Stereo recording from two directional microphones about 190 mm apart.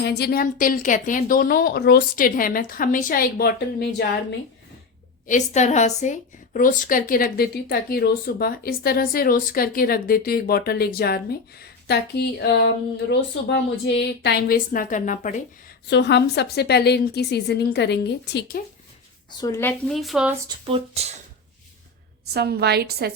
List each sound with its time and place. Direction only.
0.0 s a woman's voice: 60° left (ahead or behind)
5.2 s a woman's voice: 40° left (ahead or behind)
15.9 s a woman's voice: 65° left (ahead or behind)
19.3 s a woman's voice: 20° left (ahead or behind)
19.9 s speech: centre (ahead or behind)
20.7 s speech: 30° right (ahead or behind)
22.3 s a woman's voice: 60° right (ahead or behind)